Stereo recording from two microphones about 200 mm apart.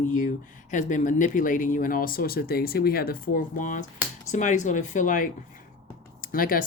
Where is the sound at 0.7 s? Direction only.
40° left (ahead or behind).